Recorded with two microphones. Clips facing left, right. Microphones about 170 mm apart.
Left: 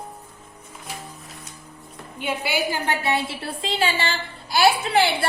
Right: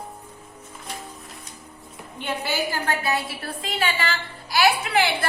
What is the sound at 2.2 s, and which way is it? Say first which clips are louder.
A woman's voice: left 2 dB; 10° left (ahead or behind).